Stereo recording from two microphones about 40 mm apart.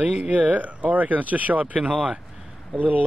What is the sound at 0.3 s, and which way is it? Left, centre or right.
Speech, right.